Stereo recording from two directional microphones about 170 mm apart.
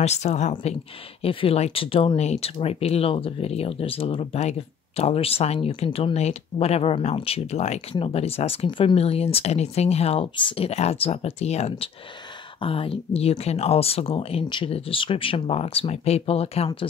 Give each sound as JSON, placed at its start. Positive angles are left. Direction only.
{"t": 0.0, "sound": "speech", "side_deg": 40}